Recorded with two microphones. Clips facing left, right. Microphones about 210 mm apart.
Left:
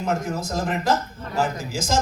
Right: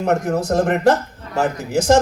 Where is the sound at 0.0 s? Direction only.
65° right (ahead or behind).